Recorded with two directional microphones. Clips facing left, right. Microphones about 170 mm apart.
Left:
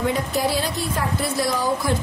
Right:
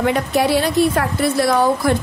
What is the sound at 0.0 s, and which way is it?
A woman's voice, 70° right (ahead or behind).